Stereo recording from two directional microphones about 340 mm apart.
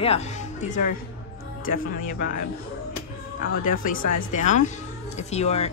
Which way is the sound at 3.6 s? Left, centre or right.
Left.